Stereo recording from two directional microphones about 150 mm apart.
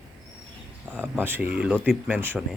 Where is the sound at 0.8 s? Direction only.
10° right (ahead or behind).